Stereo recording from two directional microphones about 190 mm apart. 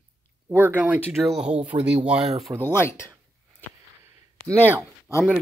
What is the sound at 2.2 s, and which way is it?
Speech, 30° right (ahead or behind).